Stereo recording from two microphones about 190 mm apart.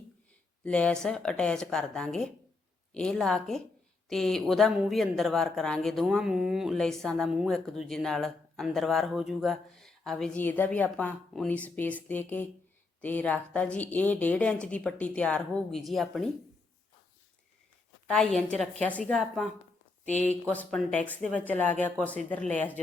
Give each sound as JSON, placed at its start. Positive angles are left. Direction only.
{"t": 0.6, "sound": "a woman's voice", "side_deg": 5}
{"t": 18.1, "sound": "a woman's voice", "side_deg": 5}
{"t": 20.5, "sound": "a woman's voice", "side_deg": 5}